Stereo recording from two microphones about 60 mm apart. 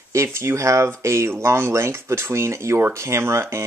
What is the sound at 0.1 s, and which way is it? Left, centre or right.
Speech, right.